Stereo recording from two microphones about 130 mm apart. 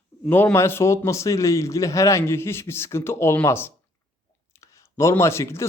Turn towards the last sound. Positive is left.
turn(degrees=20)  # may be behind; listen again after turning